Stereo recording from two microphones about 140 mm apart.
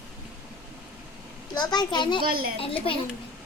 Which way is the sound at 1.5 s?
30° left (ahead or behind).